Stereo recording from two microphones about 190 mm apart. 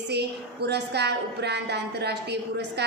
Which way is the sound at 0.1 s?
60° right (ahead or behind).